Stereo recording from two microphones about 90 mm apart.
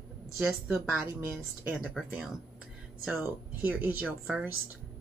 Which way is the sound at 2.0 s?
10° left (ahead or behind).